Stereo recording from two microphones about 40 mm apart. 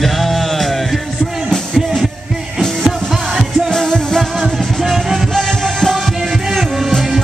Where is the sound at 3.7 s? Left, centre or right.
Centre.